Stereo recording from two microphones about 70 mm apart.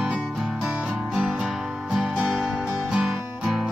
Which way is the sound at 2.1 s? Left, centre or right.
Centre.